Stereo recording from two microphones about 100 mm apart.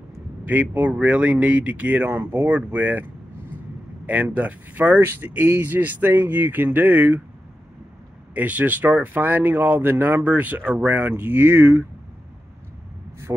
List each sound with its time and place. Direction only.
0.5 s speech: 15° right (ahead or behind)
8.4 s speech: 15° right (ahead or behind)